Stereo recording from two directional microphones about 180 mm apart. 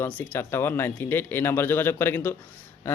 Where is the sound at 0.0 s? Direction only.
15° left (ahead or behind).